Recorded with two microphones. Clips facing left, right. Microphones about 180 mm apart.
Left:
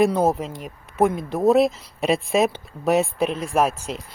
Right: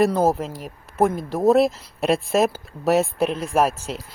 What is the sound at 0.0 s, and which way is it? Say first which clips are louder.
Speech: even; centre (ahead or behind).